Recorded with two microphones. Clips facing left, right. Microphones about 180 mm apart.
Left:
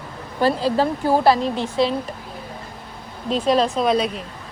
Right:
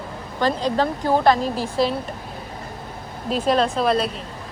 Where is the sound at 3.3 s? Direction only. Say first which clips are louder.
Left 1 dB; centre (ahead or behind).